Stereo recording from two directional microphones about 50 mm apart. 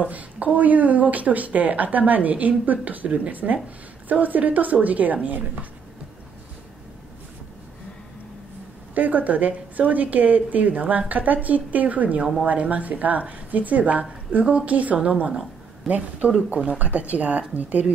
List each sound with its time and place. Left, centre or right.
0.0 s a woman's voice: right
8.9 s a woman's voice: right
15.8 s speech: centre
16.4 s speech: right